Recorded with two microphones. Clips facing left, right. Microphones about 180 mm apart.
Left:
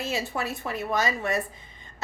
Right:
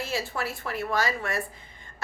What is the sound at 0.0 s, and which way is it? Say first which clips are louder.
A woman's voice: left 1 dB; 20° left (ahead or behind).